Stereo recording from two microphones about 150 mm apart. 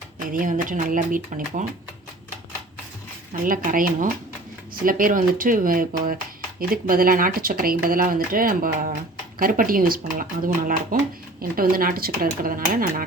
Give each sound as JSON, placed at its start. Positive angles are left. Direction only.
{"t": 0.3, "sound": "speech", "side_deg": -65}
{"t": 3.4, "sound": "speech", "side_deg": -65}